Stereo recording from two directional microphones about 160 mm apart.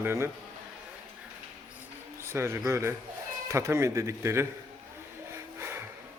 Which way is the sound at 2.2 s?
15° right (ahead or behind).